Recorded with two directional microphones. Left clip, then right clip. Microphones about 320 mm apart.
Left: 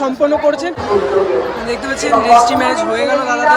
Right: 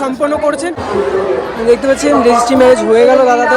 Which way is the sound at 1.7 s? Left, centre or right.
Centre.